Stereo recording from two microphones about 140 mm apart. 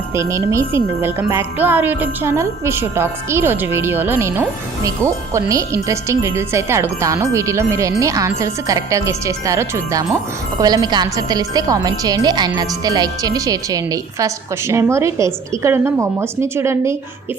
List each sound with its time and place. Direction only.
0.1 s a woman's voice: 20° right (ahead or behind)
1.3 s jingle bell: 15° right (ahead or behind)
5.3 s a woman's voice: 20° right (ahead or behind)